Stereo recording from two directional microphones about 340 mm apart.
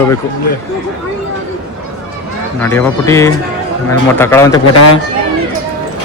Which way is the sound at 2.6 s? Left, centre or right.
Centre.